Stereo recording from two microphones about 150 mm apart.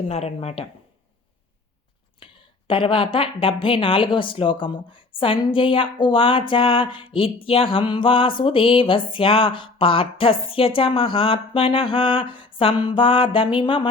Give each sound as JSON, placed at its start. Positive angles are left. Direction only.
{"t": 0.1, "sound": "speech", "side_deg": 45}
{"t": 2.1, "sound": "a woman's voice", "side_deg": 35}